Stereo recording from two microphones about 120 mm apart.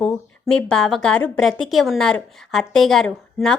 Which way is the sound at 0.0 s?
5° left (ahead or behind).